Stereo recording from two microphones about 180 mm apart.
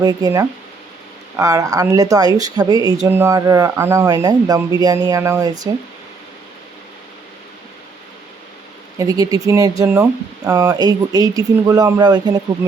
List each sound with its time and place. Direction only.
0.0 s speech: 20° right (ahead or behind)
9.0 s speech: 20° right (ahead or behind)